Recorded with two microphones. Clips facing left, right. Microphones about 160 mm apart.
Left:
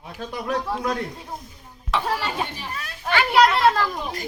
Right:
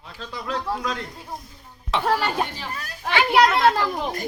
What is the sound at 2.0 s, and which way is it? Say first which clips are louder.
Speech: right 8 dB; 45° right (ahead or behind).